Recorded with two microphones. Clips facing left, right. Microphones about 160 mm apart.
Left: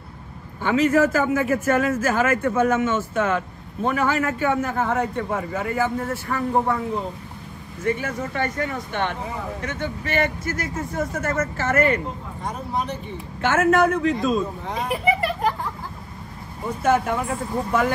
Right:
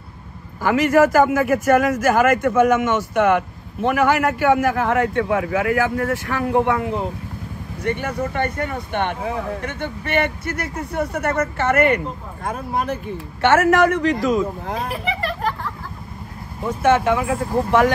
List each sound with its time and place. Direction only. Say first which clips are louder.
0.6 s a man's voice: right 3 dB; 80° right
7.8 s speech: right 2 dB; 70° right (ahead or behind)
9.7 s a man's voice: right 1 dB; 60° right (ahead or behind); by 14.4 s 85° right
15.1 s speech: left 1 dB; 10° left (ahead or behind)
16.6 s speech: right 4 dB; 90° right